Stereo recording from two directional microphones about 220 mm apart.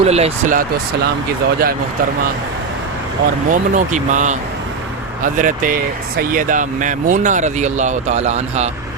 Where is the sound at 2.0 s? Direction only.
40° right (ahead or behind).